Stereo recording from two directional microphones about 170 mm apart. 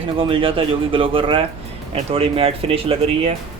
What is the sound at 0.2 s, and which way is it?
Speech, 30° right (ahead or behind).